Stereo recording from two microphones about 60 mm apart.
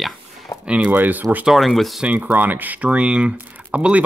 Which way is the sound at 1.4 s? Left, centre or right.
Centre.